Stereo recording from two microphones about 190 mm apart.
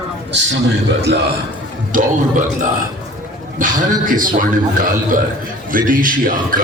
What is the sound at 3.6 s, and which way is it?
A man's voice, 45° right (ahead or behind).